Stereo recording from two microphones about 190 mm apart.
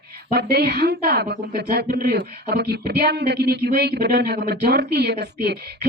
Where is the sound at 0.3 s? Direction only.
55° right (ahead or behind).